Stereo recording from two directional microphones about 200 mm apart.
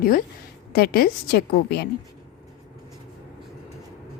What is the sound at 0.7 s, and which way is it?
A woman's voice, 50° left (ahead or behind).